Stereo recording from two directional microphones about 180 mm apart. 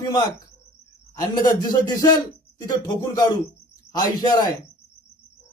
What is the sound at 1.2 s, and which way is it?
A man's voice, 20° left (ahead or behind).